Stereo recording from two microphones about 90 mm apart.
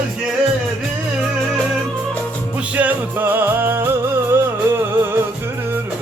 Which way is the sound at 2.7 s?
20° right (ahead or behind).